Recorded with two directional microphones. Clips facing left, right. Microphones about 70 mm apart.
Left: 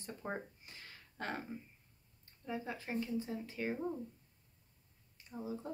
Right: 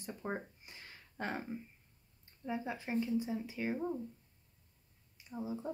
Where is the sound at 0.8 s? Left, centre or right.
Centre.